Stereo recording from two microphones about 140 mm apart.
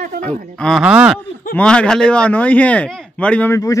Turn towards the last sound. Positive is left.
turn(degrees=25)  # may be behind; listen again after turning